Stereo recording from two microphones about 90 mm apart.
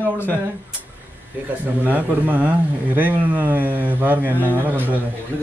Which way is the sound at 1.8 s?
20° right (ahead or behind).